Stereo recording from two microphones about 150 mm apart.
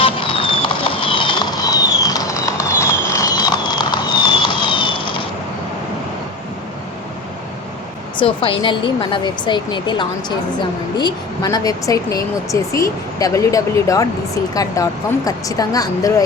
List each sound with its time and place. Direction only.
0.0 s vehicle: 35° left (ahead or behind)
8.2 s speech: 35° left (ahead or behind)